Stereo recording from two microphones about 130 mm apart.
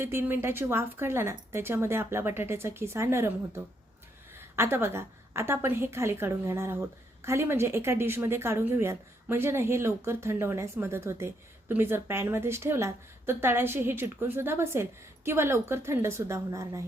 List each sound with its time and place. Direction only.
0.0 s a woman's voice: 20° right (ahead or behind)